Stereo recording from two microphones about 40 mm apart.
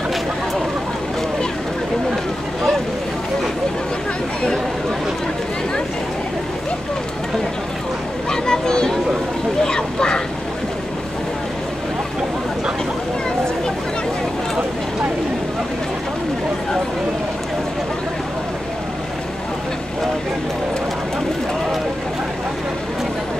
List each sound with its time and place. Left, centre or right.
8.3 s children playing: centre
9.6 s duck: centre